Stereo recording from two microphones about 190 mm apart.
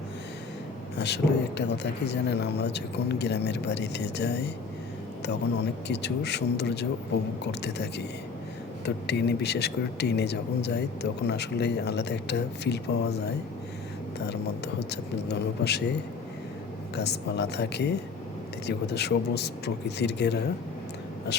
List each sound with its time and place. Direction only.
0.9 s speech: 65° left (ahead or behind)
5.9 s speech: 65° left (ahead or behind)
14.3 s speech: 60° left (ahead or behind)
16.9 s speech: 60° left (ahead or behind)